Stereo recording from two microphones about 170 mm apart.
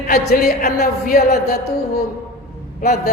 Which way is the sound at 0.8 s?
65° left (ahead or behind).